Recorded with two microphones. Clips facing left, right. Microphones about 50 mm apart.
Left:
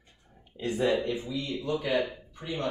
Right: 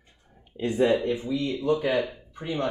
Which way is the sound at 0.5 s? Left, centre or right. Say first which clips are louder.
Right 4 dB; right.